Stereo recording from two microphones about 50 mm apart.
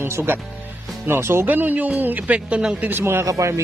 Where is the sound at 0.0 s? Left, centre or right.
Right.